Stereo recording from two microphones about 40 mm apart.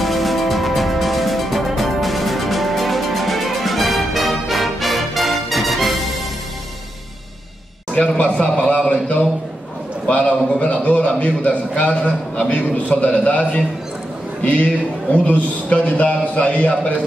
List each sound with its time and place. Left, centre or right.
0.0 s music: centre
7.9 s a man's voice: left
12.4 s a man's voice: left
15.1 s a man's voice: left